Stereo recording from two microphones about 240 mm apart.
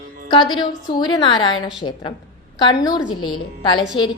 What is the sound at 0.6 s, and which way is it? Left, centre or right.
A woman's voice, centre.